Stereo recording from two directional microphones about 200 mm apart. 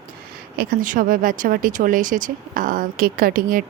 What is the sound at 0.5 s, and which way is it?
Speech, 50° right (ahead or behind).